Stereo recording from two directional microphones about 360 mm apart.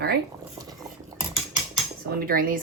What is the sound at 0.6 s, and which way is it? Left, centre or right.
Cutlery, centre.